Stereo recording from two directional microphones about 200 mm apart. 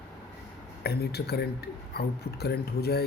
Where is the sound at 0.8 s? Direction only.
55° left (ahead or behind).